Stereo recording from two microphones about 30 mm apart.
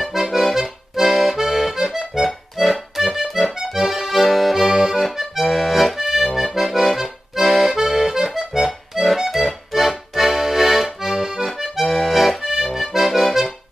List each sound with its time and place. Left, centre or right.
0.0 s accordion: centre
5.9 s accordion: centre
11.8 s accordion: centre
12.4 s accordion: centre